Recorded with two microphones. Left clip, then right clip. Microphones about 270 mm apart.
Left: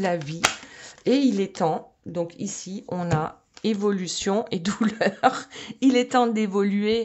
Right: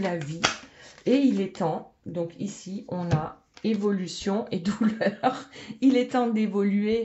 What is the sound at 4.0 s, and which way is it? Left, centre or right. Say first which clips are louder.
Speech: left 5 dB; left.